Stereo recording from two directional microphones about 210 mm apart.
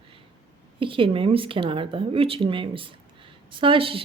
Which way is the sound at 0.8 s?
25° right (ahead or behind).